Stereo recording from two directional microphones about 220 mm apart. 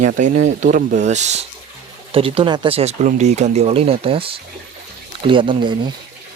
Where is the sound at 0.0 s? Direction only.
35° right (ahead or behind).